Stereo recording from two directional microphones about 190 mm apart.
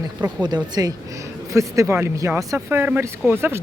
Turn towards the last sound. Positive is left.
turn(degrees=-10)  # may be behind; listen again after turning